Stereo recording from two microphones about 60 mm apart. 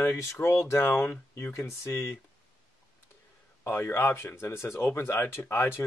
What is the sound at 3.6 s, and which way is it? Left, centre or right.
Speech, left.